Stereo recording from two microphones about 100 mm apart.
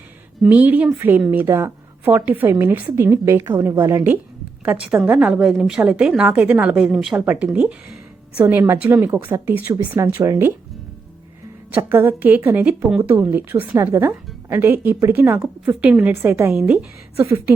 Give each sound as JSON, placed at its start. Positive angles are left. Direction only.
{"t": 0.4, "sound": "a woman's voice", "side_deg": -15}
{"t": 4.6, "sound": "a woman's voice", "side_deg": -15}
{"t": 11.7, "sound": "a woman's voice", "side_deg": -20}
{"t": 17.2, "sound": "a woman's voice", "side_deg": -30}